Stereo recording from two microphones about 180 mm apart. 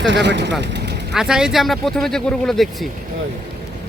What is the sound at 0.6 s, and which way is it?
Vehicle, 70° right (ahead or behind).